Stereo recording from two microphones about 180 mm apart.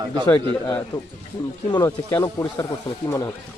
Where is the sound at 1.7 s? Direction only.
15° left (ahead or behind).